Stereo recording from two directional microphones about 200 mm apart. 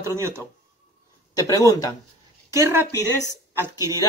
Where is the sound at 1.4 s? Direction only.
20° left (ahead or behind).